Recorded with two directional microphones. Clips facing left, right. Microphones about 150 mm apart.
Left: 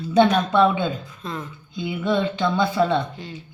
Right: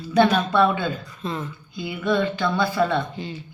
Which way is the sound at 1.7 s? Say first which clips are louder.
Even; 20° left (ahead or behind).